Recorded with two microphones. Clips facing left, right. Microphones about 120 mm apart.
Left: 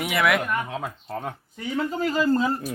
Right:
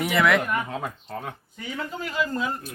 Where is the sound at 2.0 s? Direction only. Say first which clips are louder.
Left 6 dB; 35° left (ahead or behind).